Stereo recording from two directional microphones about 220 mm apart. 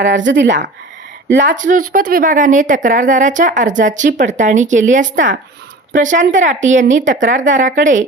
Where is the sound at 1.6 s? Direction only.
35° right (ahead or behind).